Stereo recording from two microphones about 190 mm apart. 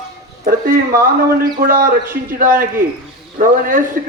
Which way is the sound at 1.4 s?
50° right (ahead or behind).